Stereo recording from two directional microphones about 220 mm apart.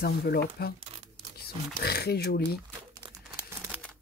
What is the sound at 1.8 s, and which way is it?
Speech, 45° left (ahead or behind).